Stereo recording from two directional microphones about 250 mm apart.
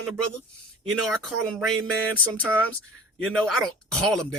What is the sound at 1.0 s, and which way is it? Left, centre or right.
Speech, centre.